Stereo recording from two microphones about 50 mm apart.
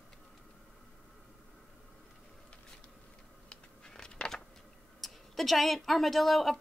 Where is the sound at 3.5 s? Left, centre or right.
Centre.